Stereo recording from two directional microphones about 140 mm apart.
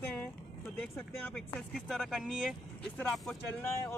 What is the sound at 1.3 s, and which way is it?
Speech, centre (ahead or behind).